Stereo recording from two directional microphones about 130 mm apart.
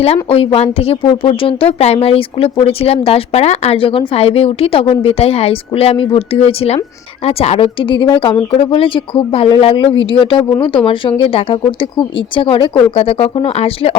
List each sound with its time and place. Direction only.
0.3 s a woman's voice: 50° left (ahead or behind)